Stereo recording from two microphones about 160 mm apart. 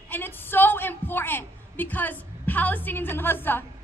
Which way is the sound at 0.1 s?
15° left (ahead or behind).